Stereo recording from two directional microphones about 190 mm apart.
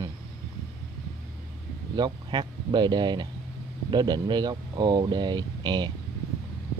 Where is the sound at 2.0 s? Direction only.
20° right (ahead or behind).